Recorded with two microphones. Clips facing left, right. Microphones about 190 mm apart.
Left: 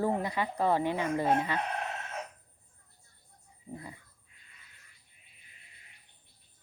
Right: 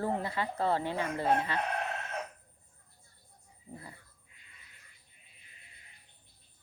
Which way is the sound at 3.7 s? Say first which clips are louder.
Left 4 dB; 15° left (ahead or behind).